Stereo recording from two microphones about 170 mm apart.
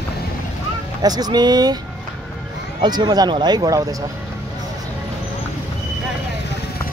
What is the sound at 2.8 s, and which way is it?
Speech, 25° right (ahead or behind).